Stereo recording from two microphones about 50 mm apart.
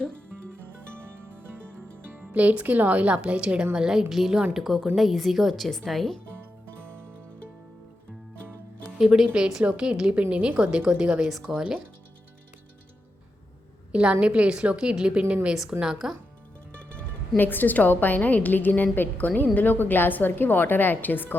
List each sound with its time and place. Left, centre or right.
0.5 s music: right
2.1 s speech: right
4.1 s a woman's voice: centre
9.3 s speech: centre
11.3 s a woman's voice: centre
13.9 s speech: right
15.8 s speech: centre
17.3 s a woman's voice: left